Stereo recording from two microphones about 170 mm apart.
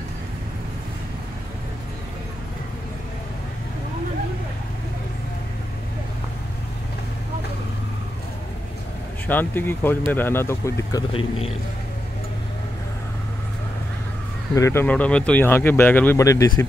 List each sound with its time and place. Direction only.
9.3 s speech: 10° left (ahead or behind)
11.1 s a man's voice: 35° left (ahead or behind)
14.5 s speech: 15° left (ahead or behind)